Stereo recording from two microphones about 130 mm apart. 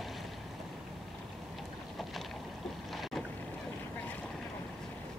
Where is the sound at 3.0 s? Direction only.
Centre (ahead or behind).